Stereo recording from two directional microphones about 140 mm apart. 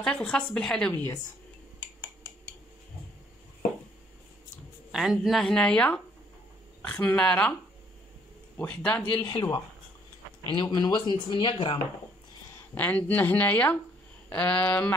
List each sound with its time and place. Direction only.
0.0 s speech: 5° left (ahead or behind)
4.9 s a woman's voice: centre (ahead or behind)
8.5 s speech: 15° left (ahead or behind)
9.3 s speech: 25° left (ahead or behind)
12.7 s speech: 10° left (ahead or behind)